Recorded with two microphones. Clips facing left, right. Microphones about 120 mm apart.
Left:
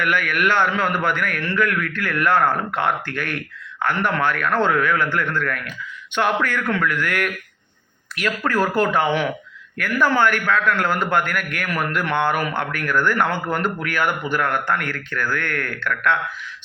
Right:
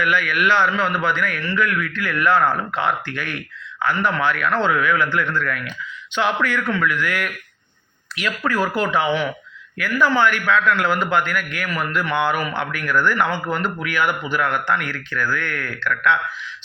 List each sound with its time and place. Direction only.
0.0 s a man's voice: 50° left (ahead or behind)
8.4 s a man's voice: 50° left (ahead or behind)